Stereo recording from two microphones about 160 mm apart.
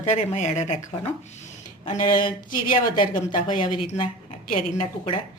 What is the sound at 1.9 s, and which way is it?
Speech, 55° left (ahead or behind).